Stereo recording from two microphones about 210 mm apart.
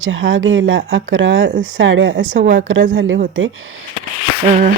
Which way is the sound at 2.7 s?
65° right (ahead or behind).